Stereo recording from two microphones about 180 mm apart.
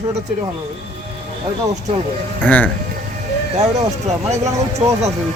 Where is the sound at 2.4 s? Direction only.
10° left (ahead or behind).